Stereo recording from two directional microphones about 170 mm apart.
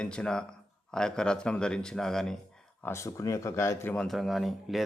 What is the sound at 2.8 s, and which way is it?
Speech, 15° left (ahead or behind).